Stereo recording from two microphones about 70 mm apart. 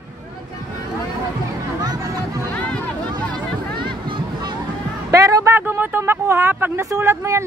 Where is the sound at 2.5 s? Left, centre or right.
Centre.